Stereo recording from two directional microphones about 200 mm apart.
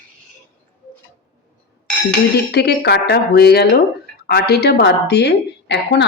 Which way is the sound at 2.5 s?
55° left (ahead or behind).